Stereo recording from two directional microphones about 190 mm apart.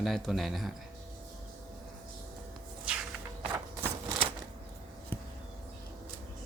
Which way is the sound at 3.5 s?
15° right (ahead or behind).